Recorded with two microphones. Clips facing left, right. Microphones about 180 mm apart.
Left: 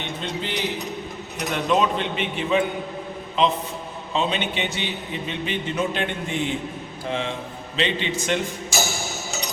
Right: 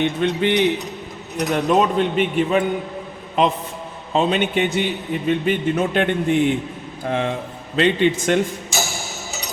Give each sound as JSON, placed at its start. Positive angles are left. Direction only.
{"t": 0.2, "sound": "a man's voice", "side_deg": -65}
{"t": 1.4, "sound": "a man's voice", "side_deg": -45}